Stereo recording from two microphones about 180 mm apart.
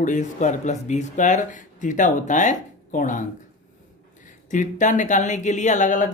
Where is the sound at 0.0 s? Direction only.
45° left (ahead or behind).